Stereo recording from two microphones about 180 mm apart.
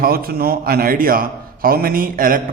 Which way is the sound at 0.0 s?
55° right (ahead or behind).